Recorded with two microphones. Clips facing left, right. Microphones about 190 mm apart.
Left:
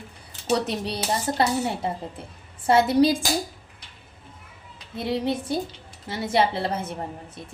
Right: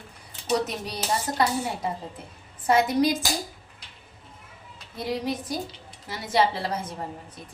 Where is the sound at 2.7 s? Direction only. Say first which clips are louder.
Left 3 dB; 30° left (ahead or behind).